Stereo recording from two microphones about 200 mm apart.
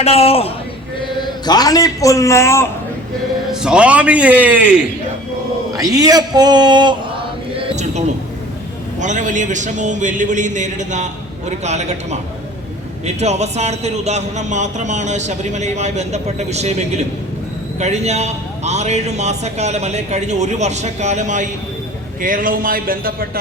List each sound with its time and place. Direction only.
0.0 s a man's voice: 30° left (ahead or behind)
1.5 s a man's voice: 20° left (ahead or behind)
3.5 s a man's voice: 5° right (ahead or behind)
5.7 s a man's voice: 20° right (ahead or behind)
7.6 s a sound: 35° right (ahead or behind)
9.0 s a man's voice: 40° right (ahead or behind)
17.7 s a man's voice: 35° right (ahead or behind)